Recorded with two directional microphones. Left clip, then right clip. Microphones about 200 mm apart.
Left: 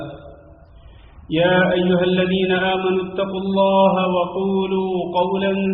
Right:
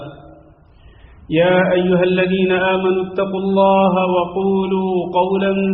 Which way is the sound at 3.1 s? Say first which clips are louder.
Right 4 dB; 25° right (ahead or behind).